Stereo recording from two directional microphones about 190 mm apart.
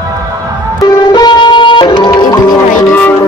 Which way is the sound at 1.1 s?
25° left (ahead or behind).